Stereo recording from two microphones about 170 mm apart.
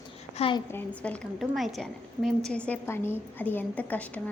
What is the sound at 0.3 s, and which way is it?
Speech, 30° left (ahead or behind).